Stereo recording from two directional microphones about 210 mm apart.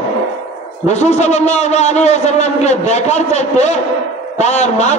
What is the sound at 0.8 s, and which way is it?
A man's voice, 35° left (ahead or behind).